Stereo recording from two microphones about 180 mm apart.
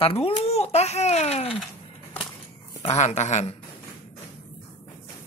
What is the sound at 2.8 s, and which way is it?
Speech, 40° left (ahead or behind).